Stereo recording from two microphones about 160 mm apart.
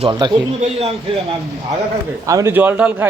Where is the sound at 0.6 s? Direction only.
40° right (ahead or behind).